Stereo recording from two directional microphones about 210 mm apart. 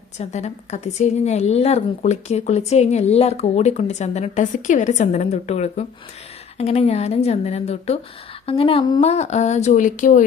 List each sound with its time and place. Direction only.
0.2 s a woman's voice: 30° left (ahead or behind)